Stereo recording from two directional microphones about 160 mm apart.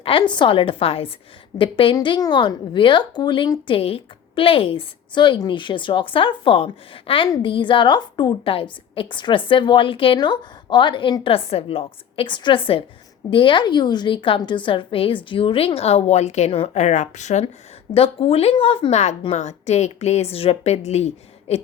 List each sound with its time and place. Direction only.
0.0 s a woman's voice: 30° left (ahead or behind)
17.9 s a woman's voice: 35° left (ahead or behind)